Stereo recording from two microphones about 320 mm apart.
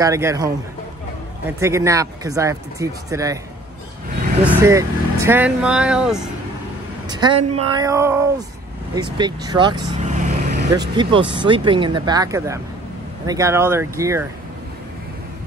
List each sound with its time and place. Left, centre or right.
0.0 s speech: centre
1.6 s speech: centre
4.5 s speech: centre
7.1 s a woman's voice: centre
7.3 s speech: right
7.7 s speech: centre